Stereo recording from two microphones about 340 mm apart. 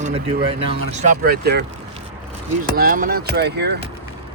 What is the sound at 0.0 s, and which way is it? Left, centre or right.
Speech, centre.